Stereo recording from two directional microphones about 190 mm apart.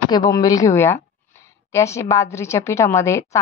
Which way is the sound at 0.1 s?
20° left (ahead or behind).